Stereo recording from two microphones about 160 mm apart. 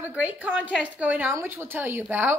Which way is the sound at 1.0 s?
10° right (ahead or behind).